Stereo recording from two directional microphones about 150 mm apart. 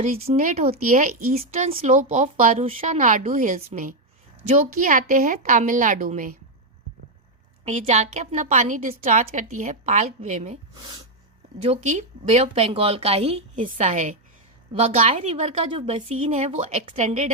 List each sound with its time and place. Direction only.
0.0 s a woman's voice: 50° right (ahead or behind)
2.0 s a woman's voice: 55° right (ahead or behind)
7.6 s a woman's voice: 50° right (ahead or behind)
10.8 s speech: 30° right (ahead or behind)
11.6 s a woman's voice: 50° right (ahead or behind)
13.7 s a woman's voice: 55° right (ahead or behind)
14.7 s a woman's voice: 40° right (ahead or behind)